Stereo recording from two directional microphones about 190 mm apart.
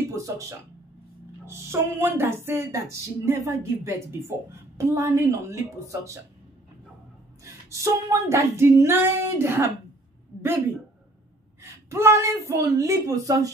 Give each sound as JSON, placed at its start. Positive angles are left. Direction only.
{"t": 0.1, "sound": "a woman's voice", "side_deg": -15}
{"t": 7.7, "sound": "a woman's voice", "side_deg": -15}
{"t": 11.6, "sound": "a woman's voice", "side_deg": -15}